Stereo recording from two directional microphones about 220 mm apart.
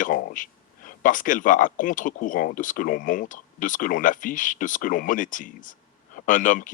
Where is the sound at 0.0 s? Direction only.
40° left (ahead or behind).